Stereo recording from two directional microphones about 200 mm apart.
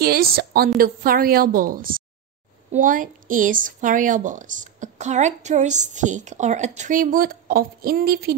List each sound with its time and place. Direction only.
0.0 s a woman's voice: 50° right (ahead or behind)